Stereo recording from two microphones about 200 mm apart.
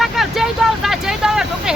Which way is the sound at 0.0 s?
Centre (ahead or behind).